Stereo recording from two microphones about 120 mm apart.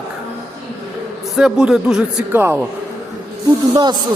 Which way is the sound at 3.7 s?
35° right (ahead or behind).